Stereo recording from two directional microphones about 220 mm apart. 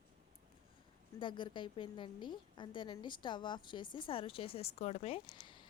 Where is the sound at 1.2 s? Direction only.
20° left (ahead or behind).